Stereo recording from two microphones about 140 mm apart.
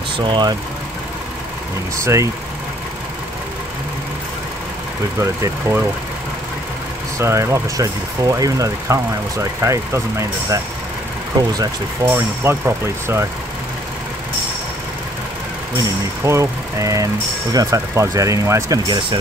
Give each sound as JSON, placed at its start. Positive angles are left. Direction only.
{"t": 0.2, "sound": "speech", "side_deg": -30}
{"t": 2.0, "sound": "speech", "side_deg": -20}
{"t": 5.2, "sound": "speech", "side_deg": -20}
{"t": 7.2, "sound": "speech", "side_deg": -20}
{"t": 12.1, "sound": "speech", "side_deg": -15}
{"t": 16.3, "sound": "speech", "side_deg": -20}